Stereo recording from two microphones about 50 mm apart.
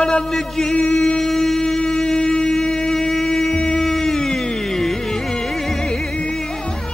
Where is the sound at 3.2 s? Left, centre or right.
Centre.